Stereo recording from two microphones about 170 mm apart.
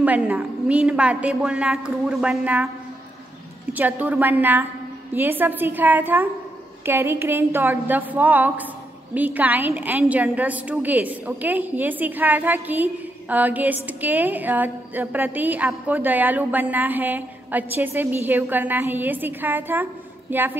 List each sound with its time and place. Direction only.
0.0 s a woman's voice: 10° right (ahead or behind)
3.7 s a woman's voice: 10° right (ahead or behind)